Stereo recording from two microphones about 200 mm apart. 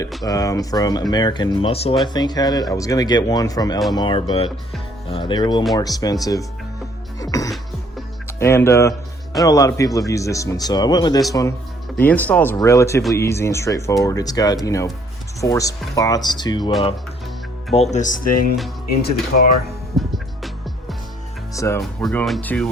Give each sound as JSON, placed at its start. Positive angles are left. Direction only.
{"t": 0.3, "sound": "speech", "side_deg": 15}
{"t": 7.2, "sound": "music", "side_deg": 15}
{"t": 8.4, "sound": "speech", "side_deg": 15}
{"t": 17.7, "sound": "speech", "side_deg": 35}
{"t": 20.0, "sound": "music", "side_deg": 0}
{"t": 21.5, "sound": "speech", "side_deg": 15}
{"t": 21.8, "sound": "speech", "side_deg": 0}